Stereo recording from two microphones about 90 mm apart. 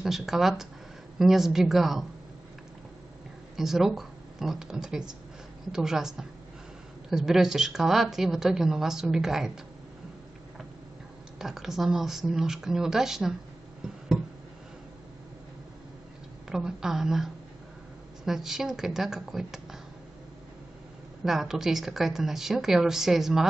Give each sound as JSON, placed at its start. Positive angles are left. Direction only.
{"t": 0.0, "sound": "a woman's voice", "side_deg": -5}
{"t": 3.5, "sound": "a woman's voice", "side_deg": -5}
{"t": 11.3, "sound": "a woman's voice", "side_deg": -5}
{"t": 13.8, "sound": "a sound", "side_deg": -10}
{"t": 16.4, "sound": "a woman's voice", "side_deg": -5}
{"t": 21.2, "sound": "a woman's voice", "side_deg": -5}